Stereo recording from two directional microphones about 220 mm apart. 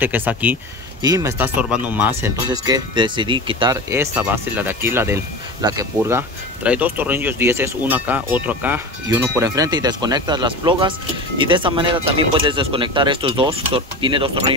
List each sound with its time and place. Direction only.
0.0 s speech: 10° right (ahead or behind); by 14.4 s 25° right (ahead or behind)